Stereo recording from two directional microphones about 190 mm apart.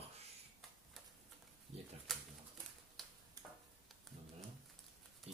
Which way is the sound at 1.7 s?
35° right (ahead or behind).